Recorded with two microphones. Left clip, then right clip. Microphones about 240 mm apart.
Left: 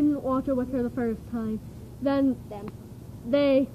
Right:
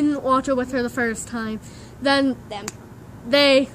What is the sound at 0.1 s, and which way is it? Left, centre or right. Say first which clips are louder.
A woman's voice: right 7 dB; centre.